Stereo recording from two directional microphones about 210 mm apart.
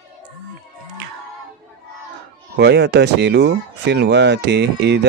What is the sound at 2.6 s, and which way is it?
Speech, 50° right (ahead or behind).